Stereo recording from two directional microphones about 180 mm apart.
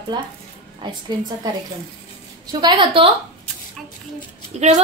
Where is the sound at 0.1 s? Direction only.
25° right (ahead or behind).